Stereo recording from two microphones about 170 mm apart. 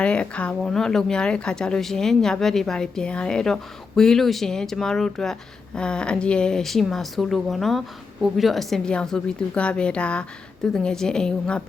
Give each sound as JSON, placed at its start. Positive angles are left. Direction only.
{"t": 0.0, "sound": "speech", "side_deg": 5}